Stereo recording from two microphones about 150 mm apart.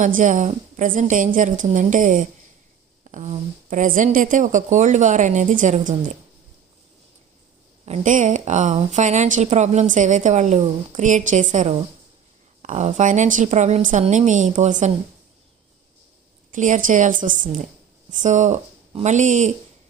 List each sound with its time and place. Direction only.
0.0 s a woman's voice: 60° right (ahead or behind)
7.9 s a woman's voice: 55° right (ahead or behind)
16.5 s a woman's voice: 60° right (ahead or behind)